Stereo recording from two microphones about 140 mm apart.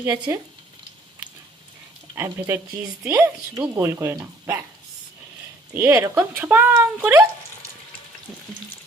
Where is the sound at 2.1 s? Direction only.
15° right (ahead or behind).